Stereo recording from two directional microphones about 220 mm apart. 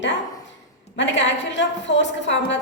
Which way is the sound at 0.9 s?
55° left (ahead or behind).